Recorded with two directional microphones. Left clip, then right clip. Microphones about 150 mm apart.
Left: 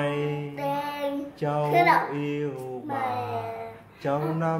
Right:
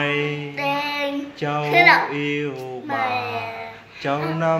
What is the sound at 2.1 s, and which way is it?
Speech, 20° right (ahead or behind).